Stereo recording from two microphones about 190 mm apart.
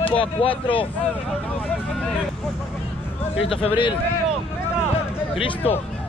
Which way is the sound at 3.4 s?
30° left (ahead or behind).